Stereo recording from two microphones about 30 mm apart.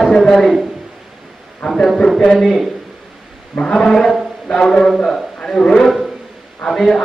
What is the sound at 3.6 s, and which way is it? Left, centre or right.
Speech, left.